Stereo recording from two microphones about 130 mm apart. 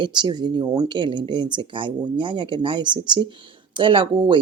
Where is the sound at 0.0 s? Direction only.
35° right (ahead or behind).